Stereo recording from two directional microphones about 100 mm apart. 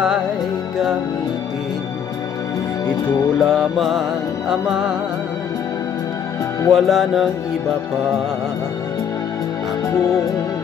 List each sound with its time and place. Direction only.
3.3 s music: centre (ahead or behind)
6.7 s music: centre (ahead or behind)